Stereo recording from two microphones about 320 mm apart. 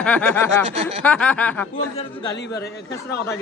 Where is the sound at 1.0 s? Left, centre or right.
Centre.